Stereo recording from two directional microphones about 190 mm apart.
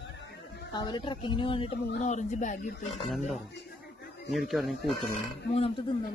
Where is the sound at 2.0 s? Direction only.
40° left (ahead or behind).